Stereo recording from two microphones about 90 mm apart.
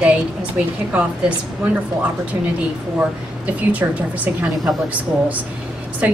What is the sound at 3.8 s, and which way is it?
Speech, 15° right (ahead or behind).